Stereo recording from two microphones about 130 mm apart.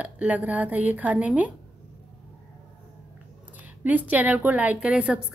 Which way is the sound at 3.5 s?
10° right (ahead or behind).